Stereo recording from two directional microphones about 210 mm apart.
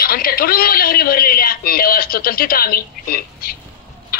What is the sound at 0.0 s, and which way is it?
A man's voice, 45° left (ahead or behind).